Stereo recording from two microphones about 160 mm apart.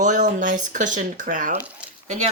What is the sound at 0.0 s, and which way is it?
Speech, 50° right (ahead or behind).